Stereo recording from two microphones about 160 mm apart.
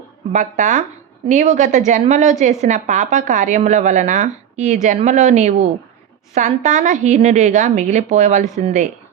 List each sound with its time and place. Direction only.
0.3 s a woman's voice: 50° right (ahead or behind)